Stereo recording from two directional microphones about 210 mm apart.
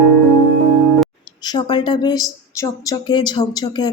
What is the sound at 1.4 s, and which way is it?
Speech, 20° left (ahead or behind).